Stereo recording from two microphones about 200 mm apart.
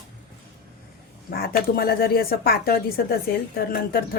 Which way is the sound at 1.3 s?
50° left (ahead or behind).